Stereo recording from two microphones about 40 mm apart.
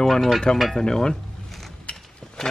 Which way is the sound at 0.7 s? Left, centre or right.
Centre.